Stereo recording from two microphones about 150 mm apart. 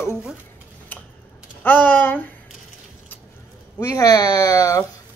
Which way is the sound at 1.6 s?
15° left (ahead or behind).